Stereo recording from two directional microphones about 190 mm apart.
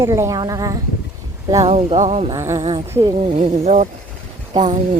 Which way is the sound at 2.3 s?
15° right (ahead or behind).